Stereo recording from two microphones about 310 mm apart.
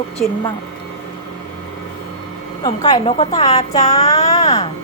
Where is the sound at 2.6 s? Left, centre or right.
Centre.